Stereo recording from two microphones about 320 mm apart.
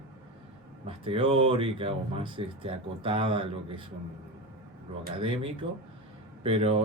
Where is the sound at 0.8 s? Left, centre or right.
Centre.